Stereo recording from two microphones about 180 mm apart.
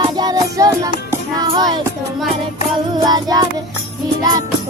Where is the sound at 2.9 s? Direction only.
20° right (ahead or behind).